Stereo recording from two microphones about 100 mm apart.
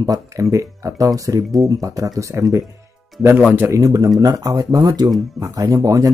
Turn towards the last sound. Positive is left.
turn(degrees=-35)  # may be behind; listen again after turning